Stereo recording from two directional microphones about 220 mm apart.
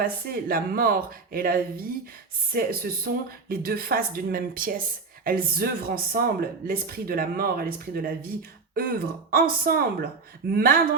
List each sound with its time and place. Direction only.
0.0 s speech: 40° right (ahead or behind)